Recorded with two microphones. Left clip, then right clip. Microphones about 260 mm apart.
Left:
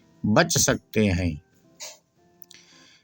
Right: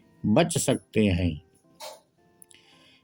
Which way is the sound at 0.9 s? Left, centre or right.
Left.